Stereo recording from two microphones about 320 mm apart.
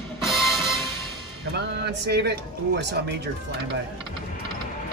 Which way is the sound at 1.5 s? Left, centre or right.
Right.